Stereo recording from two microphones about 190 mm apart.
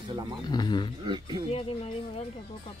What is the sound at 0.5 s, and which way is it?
Speech, 25° left (ahead or behind).